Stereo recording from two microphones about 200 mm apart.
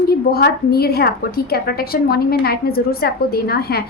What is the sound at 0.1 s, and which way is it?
A woman's voice, 50° left (ahead or behind).